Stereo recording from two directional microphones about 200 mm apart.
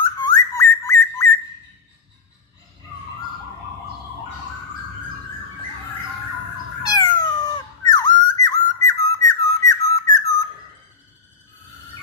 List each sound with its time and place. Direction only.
0.3 s whistling: 15° left (ahead or behind)
6.8 s cat: 20° left (ahead or behind)